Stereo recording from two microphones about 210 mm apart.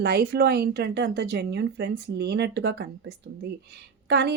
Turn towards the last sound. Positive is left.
turn(degrees=-50)  # may be behind; listen again after turning